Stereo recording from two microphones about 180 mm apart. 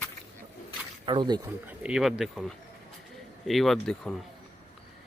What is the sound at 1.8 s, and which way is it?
A man's voice, 5° right (ahead or behind).